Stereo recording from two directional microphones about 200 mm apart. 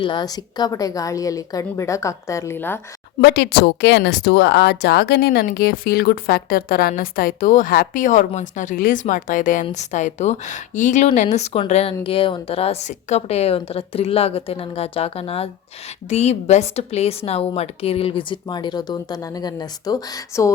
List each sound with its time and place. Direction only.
0.0 s a woman's voice: 20° left (ahead or behind)
3.2 s a woman's voice: 55° left (ahead or behind); by 20.5 s 15° left (ahead or behind)